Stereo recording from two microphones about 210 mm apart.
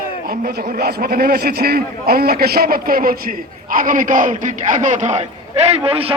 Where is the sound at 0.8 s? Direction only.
45° right (ahead or behind).